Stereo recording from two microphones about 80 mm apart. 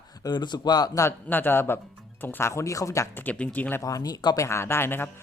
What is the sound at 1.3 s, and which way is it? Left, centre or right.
Speech, left.